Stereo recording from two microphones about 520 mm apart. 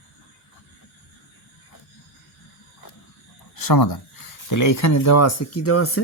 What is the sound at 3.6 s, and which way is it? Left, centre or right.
Speech, left.